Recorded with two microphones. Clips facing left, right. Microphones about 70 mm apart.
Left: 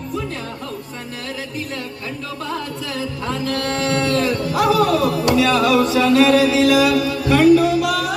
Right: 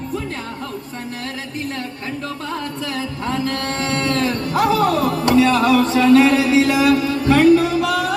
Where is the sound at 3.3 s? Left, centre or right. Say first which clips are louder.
Even; right.